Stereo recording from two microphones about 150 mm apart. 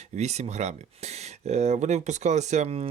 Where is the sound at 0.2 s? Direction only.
50° right (ahead or behind).